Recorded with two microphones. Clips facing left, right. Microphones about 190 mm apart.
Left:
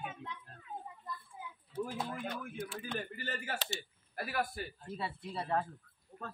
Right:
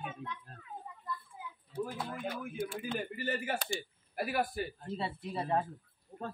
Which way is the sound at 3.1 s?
15° right (ahead or behind).